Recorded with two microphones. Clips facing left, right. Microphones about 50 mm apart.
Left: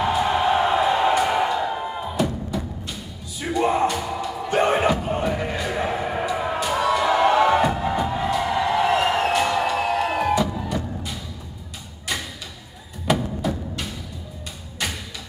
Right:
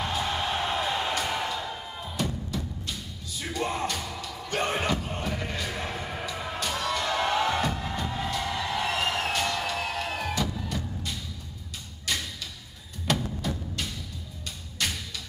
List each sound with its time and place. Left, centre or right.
0.0 s music: centre
2.1 s music: centre
13.0 s music: centre